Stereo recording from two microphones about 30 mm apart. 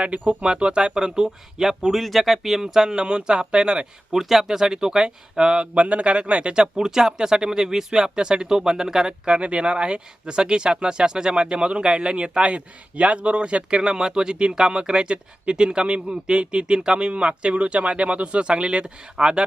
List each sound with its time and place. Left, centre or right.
0.4 s speech: right
1.9 s speech: centre
2.9 s speech: right
4.1 s speech: centre
4.4 s speech: right
5.7 s speech: right
6.7 s speech: centre
9.0 s speech: right
11.3 s speech: right
13.7 s speech: right